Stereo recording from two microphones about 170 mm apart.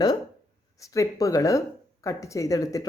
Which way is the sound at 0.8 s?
20° left (ahead or behind).